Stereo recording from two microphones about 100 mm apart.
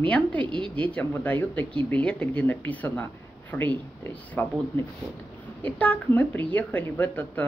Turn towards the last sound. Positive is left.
turn(degrees=15)  # may be behind; listen again after turning